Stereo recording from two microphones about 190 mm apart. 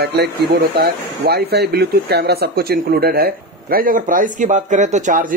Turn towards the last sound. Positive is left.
turn(degrees=-40)  # may be behind; listen again after turning